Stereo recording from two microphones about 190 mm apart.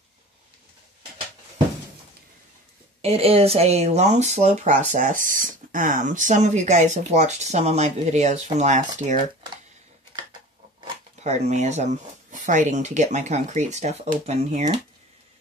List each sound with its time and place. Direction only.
3.0 s speech: 30° right (ahead or behind)
11.2 s speech: 35° right (ahead or behind)